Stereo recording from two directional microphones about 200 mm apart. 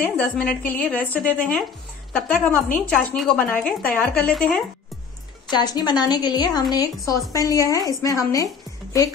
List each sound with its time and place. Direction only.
0.0 s a woman's voice: 5° left (ahead or behind)
5.5 s a woman's voice: 20° left (ahead or behind)